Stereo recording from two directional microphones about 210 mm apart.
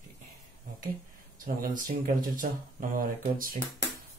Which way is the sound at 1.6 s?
40° right (ahead or behind).